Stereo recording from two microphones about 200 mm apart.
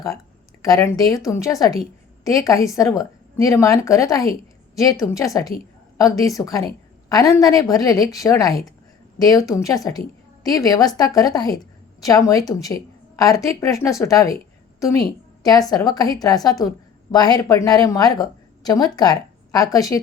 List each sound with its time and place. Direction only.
0.6 s a woman's voice: 15° left (ahead or behind)